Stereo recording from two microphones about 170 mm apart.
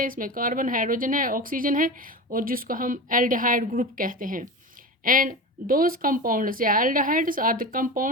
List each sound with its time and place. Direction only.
0.0 s a woman's voice: 55° right (ahead or behind)